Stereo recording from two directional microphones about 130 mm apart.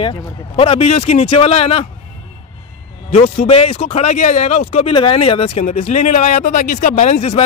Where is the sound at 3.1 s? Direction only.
55° left (ahead or behind).